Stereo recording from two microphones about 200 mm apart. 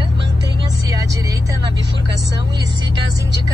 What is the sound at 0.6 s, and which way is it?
Vehicle, 20° right (ahead or behind).